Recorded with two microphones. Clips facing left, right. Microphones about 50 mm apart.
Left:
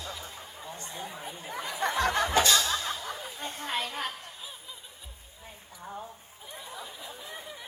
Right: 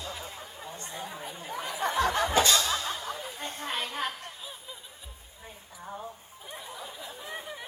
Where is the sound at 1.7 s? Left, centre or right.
Left.